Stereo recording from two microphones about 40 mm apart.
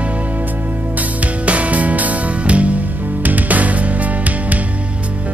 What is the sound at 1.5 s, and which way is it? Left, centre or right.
Music, right.